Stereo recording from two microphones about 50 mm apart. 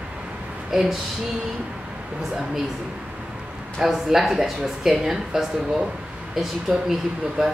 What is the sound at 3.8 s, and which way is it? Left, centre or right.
A woman's voice, centre.